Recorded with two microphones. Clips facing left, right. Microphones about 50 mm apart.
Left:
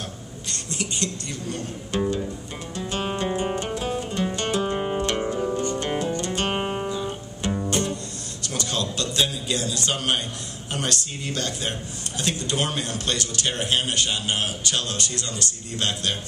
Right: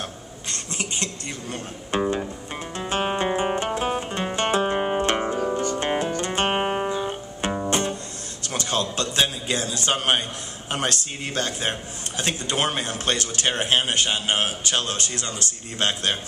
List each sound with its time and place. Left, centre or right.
0.5 s speech: right
2.7 s music: right
5.8 s guitar: right
8.5 s a sound: right
9.8 s a man's voice: right